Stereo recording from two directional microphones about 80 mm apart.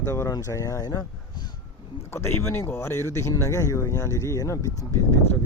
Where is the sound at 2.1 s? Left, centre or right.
Left.